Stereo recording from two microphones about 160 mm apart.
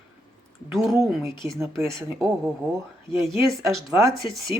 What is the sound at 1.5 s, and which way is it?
Speech, 20° right (ahead or behind).